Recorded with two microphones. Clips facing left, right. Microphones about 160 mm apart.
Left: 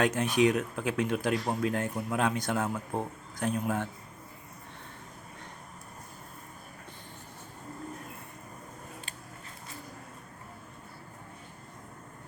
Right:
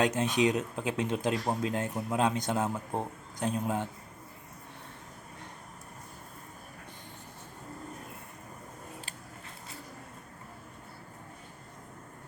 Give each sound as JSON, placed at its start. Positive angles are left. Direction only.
{"t": 0.0, "sound": "speech", "side_deg": -20}